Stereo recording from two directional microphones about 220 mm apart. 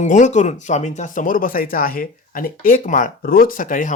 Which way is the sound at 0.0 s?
35° left (ahead or behind).